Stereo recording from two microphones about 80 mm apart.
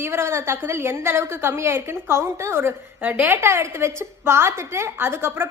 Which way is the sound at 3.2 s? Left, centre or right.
Right.